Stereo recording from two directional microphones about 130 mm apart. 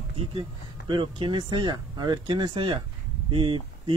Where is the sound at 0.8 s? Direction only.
35° right (ahead or behind).